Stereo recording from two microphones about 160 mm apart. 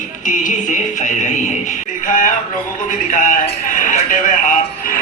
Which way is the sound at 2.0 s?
55° left (ahead or behind).